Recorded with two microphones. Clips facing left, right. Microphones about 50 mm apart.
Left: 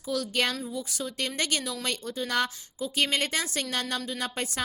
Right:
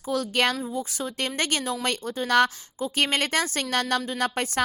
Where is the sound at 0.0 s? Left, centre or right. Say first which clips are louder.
Right 4 dB; right.